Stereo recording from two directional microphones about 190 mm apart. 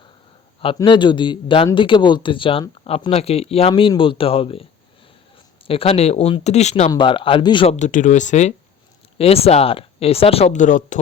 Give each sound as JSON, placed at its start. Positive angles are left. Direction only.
{"t": 0.8, "sound": "speech", "side_deg": 25}
{"t": 5.6, "sound": "speech", "side_deg": 30}
{"t": 6.9, "sound": "speech", "side_deg": 25}